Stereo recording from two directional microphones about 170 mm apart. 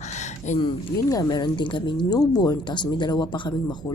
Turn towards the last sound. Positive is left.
turn(degrees=25)  # may be behind; listen again after turning